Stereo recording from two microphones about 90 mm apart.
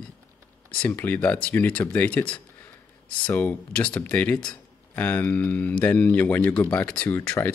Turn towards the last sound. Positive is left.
turn(degrees=20)  # may be behind; listen again after turning